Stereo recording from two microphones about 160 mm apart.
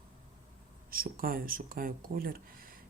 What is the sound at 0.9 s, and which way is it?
Speech, 65° right (ahead or behind).